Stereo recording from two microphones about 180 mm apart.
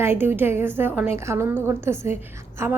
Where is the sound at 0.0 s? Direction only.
10° right (ahead or behind).